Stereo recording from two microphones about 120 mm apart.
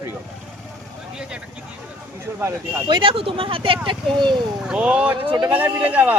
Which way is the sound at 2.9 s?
45° right (ahead or behind).